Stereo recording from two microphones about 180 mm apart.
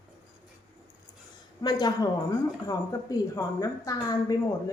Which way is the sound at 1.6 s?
25° left (ahead or behind).